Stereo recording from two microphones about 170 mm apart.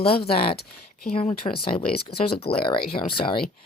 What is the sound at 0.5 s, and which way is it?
Speech, 70° left (ahead or behind).